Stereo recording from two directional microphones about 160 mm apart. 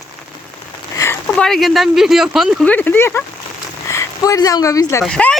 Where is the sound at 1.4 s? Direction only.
Centre (ahead or behind).